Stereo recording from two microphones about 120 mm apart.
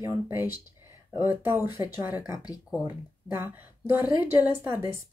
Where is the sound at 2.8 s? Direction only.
20° right (ahead or behind).